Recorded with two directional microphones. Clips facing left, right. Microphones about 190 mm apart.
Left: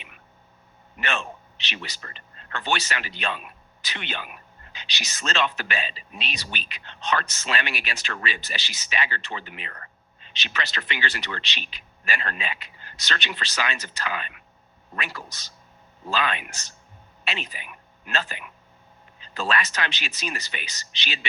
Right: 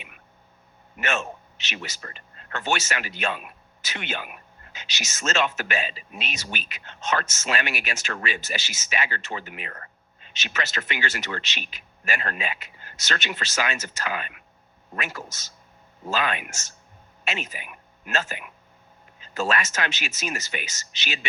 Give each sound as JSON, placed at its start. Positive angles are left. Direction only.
{"t": 2.1, "sound": "speech", "side_deg": -45}